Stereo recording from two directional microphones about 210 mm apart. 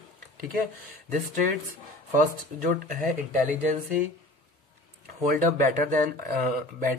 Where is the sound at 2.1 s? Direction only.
40° right (ahead or behind).